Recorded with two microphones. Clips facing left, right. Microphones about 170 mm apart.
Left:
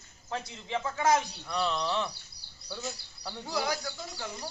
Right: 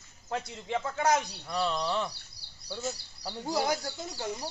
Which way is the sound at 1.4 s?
5° right (ahead or behind).